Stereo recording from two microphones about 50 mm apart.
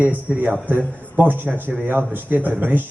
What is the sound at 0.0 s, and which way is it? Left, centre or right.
A man's voice, right.